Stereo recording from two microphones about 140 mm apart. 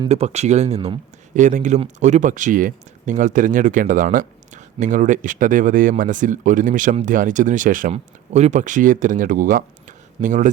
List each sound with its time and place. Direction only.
0.1 s speech: 50° right (ahead or behind)
1.3 s speech: 60° right (ahead or behind)
7.9 s speech: 55° right (ahead or behind)